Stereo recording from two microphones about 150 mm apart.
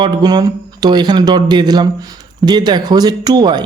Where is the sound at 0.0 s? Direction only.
25° right (ahead or behind).